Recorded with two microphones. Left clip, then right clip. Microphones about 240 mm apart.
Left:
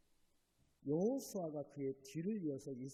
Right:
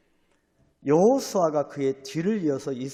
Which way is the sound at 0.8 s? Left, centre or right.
Right.